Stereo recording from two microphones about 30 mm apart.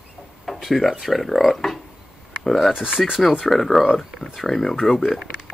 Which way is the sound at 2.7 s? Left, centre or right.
Centre.